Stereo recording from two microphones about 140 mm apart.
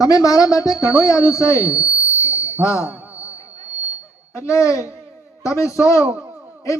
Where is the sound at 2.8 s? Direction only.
10° right (ahead or behind).